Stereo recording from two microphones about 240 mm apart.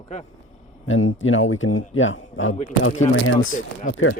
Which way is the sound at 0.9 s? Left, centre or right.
Left.